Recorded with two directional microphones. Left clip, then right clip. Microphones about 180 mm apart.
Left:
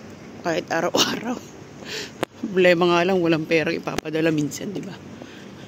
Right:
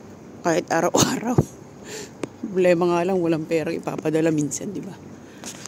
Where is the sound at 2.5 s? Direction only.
10° right (ahead or behind).